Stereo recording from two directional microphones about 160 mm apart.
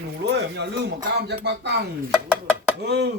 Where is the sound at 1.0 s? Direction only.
90° right.